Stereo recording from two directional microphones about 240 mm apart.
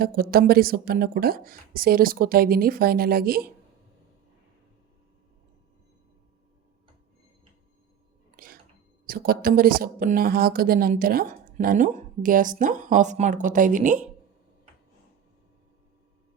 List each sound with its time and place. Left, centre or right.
0.0 s speech: right
8.4 s a sound: right
9.0 s speech: right